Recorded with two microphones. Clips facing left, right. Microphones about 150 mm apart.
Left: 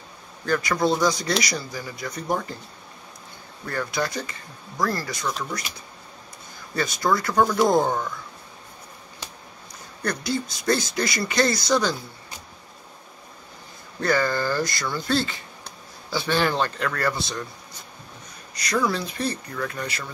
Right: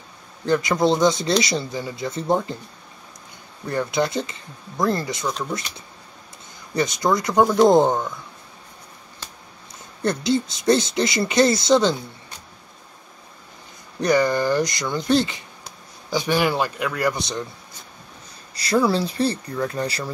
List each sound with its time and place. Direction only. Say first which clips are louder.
0.5 s speech: right 3 dB; 20° right (ahead or behind)
3.6 s speech: right 5 dB; 20° right (ahead or behind)
6.7 s speech: right 3 dB; 20° right (ahead or behind)
10.0 s speech: right 6 dB; 20° right (ahead or behind)
13.9 s speech: right 4 dB; 20° right (ahead or behind)
18.5 s speech: right 5 dB; 30° right (ahead or behind)